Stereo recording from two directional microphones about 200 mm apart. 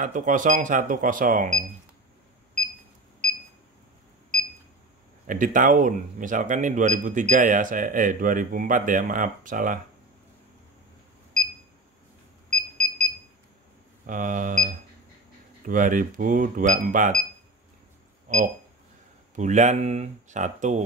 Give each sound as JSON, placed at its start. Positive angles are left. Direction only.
{"t": 0.0, "sound": "speech", "side_deg": -40}
{"t": 5.2, "sound": "speech", "side_deg": -40}
{"t": 12.4, "sound": "alarm clock", "side_deg": -35}
{"t": 14.0, "sound": "speech", "side_deg": -40}
{"t": 18.3, "sound": "speech", "side_deg": -40}